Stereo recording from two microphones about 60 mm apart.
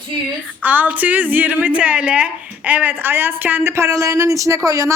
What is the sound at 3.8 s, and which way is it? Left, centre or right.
Speech, right.